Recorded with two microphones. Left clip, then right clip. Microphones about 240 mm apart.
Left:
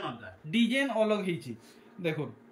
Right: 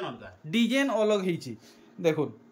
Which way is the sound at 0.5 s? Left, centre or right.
Centre.